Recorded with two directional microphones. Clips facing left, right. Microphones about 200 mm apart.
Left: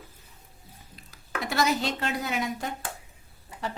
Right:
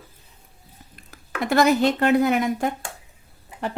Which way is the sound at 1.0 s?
55° right (ahead or behind).